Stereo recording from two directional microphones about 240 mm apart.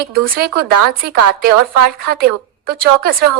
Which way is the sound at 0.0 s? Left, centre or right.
Right.